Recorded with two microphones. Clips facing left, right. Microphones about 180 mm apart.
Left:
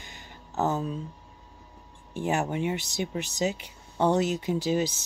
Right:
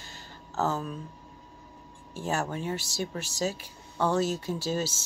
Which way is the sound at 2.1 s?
20° left (ahead or behind).